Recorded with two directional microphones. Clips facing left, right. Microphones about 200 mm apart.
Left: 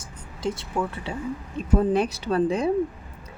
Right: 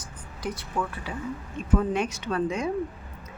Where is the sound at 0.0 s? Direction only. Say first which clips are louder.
Left 5 dB; 25° left (ahead or behind).